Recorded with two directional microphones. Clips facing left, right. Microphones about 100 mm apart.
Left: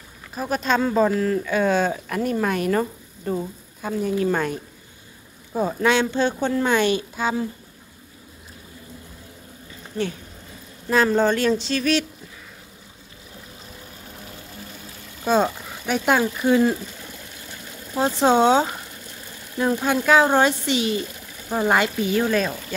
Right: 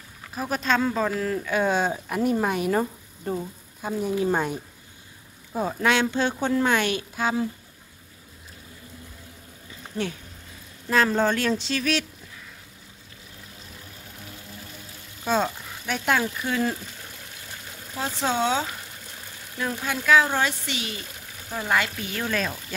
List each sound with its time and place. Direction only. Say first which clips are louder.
0.3 s speech: left 2 dB; centre (ahead or behind)
5.5 s speech: left 3 dB; centre (ahead or behind)
9.9 s speech: left 3 dB; 10° right (ahead or behind)
10.9 s speech: left 3 dB; 5° left (ahead or behind)
15.2 s speech: left 4 dB; 10° left (ahead or behind)
17.9 s speech: left 8 dB; 25° left (ahead or behind); by 22.6 s 5° left (ahead or behind)